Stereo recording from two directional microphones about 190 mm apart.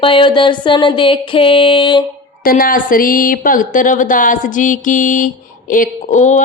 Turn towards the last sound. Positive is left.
turn(degrees=40)  # may be behind; listen again after turning